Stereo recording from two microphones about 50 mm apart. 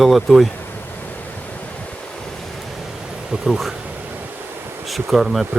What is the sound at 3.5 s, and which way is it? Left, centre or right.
Speech, centre.